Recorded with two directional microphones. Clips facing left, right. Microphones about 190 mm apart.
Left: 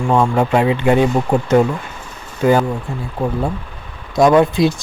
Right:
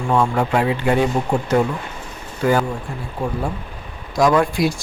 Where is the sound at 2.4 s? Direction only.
20° left (ahead or behind).